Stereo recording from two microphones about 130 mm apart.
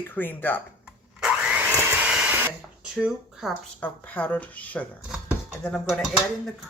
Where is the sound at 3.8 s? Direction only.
10° left (ahead or behind).